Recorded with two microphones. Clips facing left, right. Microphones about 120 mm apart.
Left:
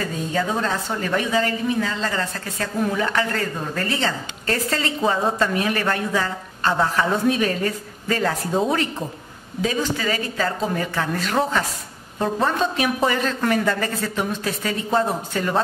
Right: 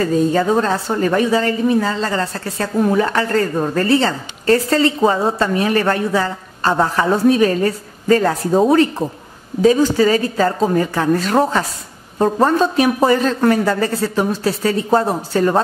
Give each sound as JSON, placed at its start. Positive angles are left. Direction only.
{"t": 0.3, "sound": "a woman's voice", "side_deg": -40}